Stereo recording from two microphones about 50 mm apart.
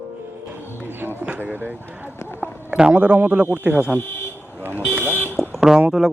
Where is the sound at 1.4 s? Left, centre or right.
Right.